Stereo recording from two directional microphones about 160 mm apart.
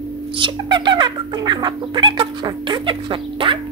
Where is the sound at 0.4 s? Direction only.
30° right (ahead or behind).